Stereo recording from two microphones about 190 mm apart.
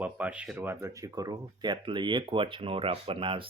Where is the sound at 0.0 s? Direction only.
5° right (ahead or behind).